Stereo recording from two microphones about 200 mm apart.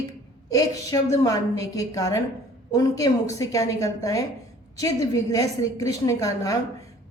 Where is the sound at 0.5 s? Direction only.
15° left (ahead or behind).